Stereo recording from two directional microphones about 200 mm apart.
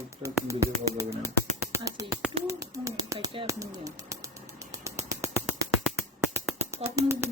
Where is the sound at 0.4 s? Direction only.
15° right (ahead or behind).